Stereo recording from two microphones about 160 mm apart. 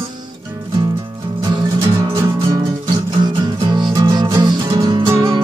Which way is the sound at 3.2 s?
25° right (ahead or behind).